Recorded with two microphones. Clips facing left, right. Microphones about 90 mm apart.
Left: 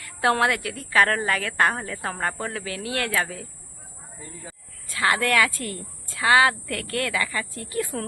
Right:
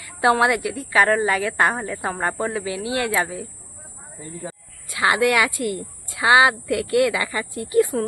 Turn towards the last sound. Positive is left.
turn(degrees=-20)  # may be behind; listen again after turning